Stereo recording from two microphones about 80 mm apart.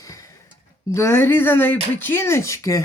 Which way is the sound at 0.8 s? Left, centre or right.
Left.